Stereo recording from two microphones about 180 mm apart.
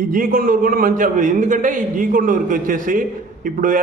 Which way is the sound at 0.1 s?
50° right (ahead or behind).